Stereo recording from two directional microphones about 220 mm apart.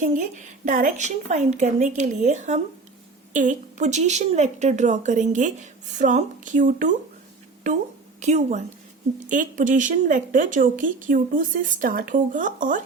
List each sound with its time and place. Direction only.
0.0 s speech: 35° right (ahead or behind)
8.2 s speech: 30° right (ahead or behind)